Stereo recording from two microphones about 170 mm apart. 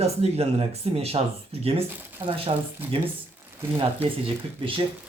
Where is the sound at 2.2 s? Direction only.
35° right (ahead or behind).